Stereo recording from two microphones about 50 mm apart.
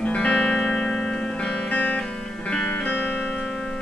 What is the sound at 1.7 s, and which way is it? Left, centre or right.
Music, left.